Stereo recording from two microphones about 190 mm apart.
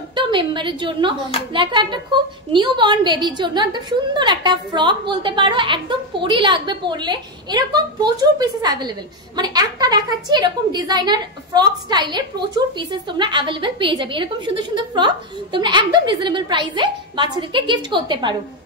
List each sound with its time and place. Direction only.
0.1 s a woman's voice: 25° right (ahead or behind)